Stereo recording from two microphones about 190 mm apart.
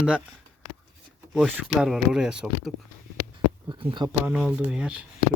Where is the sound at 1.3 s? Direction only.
5° right (ahead or behind).